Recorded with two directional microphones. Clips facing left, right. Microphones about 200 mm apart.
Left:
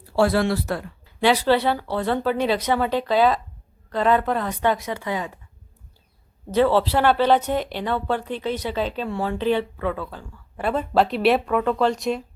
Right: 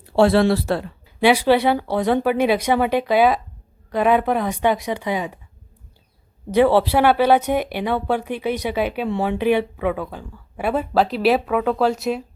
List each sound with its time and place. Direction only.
0.0 s speech: 25° right (ahead or behind)
1.2 s speech: 10° right (ahead or behind)
6.5 s speech: 15° right (ahead or behind)